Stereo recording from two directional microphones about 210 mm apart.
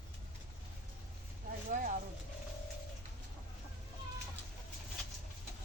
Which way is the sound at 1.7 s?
40° right (ahead or behind).